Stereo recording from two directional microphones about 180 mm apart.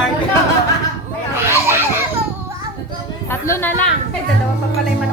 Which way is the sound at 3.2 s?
15° left (ahead or behind).